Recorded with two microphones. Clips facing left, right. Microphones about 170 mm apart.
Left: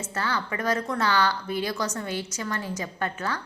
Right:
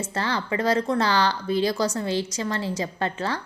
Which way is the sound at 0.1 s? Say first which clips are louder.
Right 1 dB; 35° right (ahead or behind).